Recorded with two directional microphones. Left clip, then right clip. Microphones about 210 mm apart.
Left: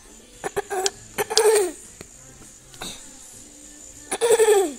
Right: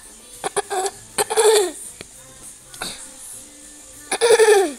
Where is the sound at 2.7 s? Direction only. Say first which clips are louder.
Right 5 dB; centre (ahead or behind).